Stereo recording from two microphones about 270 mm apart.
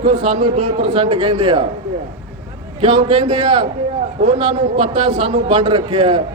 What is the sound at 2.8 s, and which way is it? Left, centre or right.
A man's voice, centre.